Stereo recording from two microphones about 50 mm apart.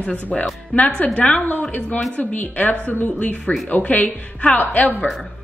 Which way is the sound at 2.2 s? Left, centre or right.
Left.